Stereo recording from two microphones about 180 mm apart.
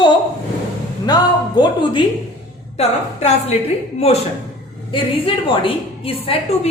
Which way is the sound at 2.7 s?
35° left (ahead or behind).